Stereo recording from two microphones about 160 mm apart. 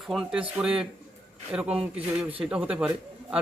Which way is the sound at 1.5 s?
5° right (ahead or behind).